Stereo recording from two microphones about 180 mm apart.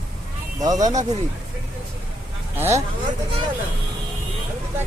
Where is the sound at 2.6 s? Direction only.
15° right (ahead or behind).